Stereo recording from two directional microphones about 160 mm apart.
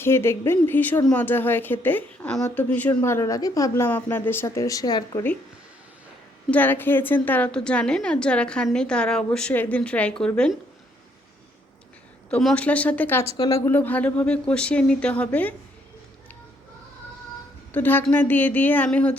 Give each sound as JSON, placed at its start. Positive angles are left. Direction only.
{"t": 0.0, "sound": "a woman's voice", "side_deg": 15}
{"t": 6.5, "sound": "a woman's voice", "side_deg": 10}
{"t": 12.3, "sound": "a woman's voice", "side_deg": 5}
{"t": 17.7, "sound": "a woman's voice", "side_deg": 10}